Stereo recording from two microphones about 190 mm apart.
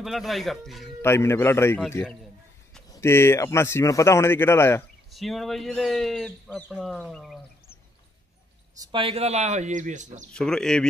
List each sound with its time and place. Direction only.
0.0 s speech: centre (ahead or behind)
1.0 s a man's voice: 15° left (ahead or behind)
5.1 s speech: centre (ahead or behind)
8.7 s speech: 30° right (ahead or behind)
10.3 s speech: 5° left (ahead or behind)